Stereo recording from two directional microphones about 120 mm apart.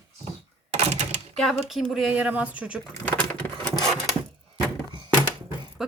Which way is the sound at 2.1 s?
15° right (ahead or behind).